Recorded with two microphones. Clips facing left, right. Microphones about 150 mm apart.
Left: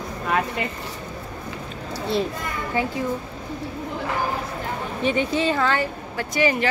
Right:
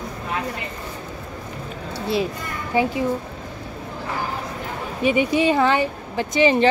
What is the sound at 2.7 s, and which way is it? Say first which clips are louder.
Speech: right 5 dB; 15° right (ahead or behind).